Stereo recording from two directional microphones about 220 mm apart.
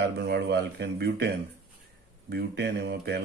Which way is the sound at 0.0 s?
50° right (ahead or behind).